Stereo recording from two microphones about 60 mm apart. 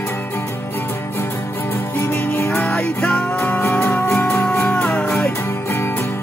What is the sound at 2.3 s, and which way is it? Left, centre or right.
Music, left.